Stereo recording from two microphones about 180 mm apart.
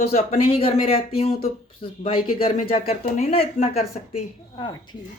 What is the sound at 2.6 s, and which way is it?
Speech, 45° left (ahead or behind).